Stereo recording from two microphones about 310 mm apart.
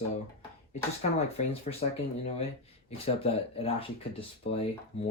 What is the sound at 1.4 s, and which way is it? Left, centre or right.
Speech, left.